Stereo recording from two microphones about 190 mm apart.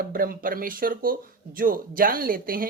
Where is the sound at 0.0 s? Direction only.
50° right (ahead or behind).